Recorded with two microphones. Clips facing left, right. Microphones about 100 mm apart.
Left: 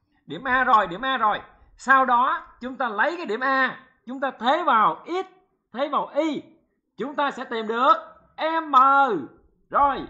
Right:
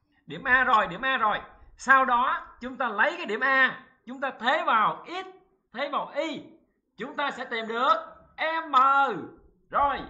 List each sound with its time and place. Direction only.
0.3 s a man's voice: 15° left (ahead or behind)